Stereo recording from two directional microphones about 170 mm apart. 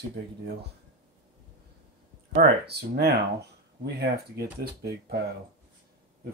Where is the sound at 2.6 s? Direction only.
75° right (ahead or behind).